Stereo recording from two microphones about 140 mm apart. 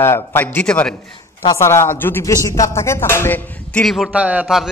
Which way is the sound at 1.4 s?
20° left (ahead or behind).